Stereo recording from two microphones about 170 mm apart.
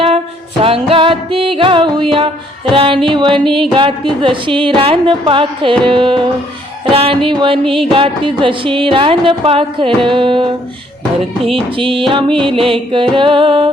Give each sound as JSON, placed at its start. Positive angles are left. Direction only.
{"t": 0.6, "sound": "music", "side_deg": -35}
{"t": 11.5, "sound": "music", "side_deg": -30}